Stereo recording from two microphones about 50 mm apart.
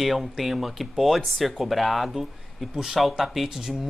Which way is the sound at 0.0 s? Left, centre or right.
Centre.